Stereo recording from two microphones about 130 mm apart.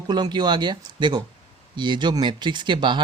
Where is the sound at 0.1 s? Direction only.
35° right (ahead or behind).